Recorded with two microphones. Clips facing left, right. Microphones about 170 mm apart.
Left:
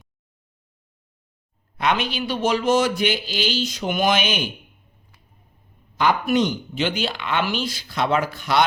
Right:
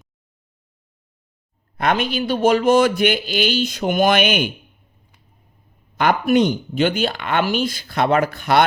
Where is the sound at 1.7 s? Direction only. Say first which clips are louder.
Right 3 dB; 50° right (ahead or behind).